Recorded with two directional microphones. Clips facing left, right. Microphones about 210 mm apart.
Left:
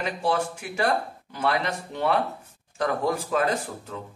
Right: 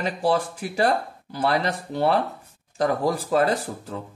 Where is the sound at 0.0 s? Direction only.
35° right (ahead or behind).